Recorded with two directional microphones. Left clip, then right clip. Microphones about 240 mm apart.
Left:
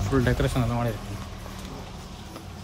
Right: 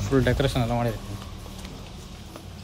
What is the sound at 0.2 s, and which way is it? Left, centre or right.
Speech, centre.